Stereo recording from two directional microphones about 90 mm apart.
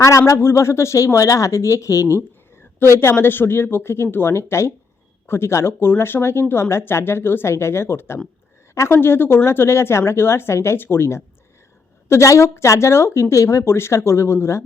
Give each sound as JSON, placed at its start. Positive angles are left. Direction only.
{"t": 0.0, "sound": "speech", "side_deg": 35}